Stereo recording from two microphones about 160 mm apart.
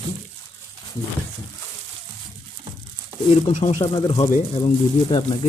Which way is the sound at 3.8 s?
30° left (ahead or behind).